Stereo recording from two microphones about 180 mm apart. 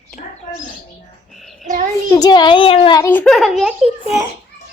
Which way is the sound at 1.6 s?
45° right (ahead or behind).